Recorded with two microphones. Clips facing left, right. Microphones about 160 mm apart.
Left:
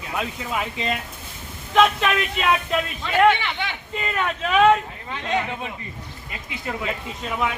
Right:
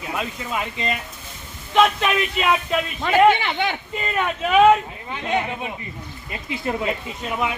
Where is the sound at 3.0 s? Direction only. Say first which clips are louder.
Right 3 dB; 50° right (ahead or behind).